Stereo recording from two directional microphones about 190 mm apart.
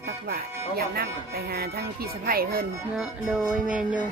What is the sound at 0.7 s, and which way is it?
Speech, 55° right (ahead or behind).